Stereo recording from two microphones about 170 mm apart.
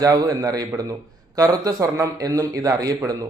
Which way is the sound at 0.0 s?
20° right (ahead or behind).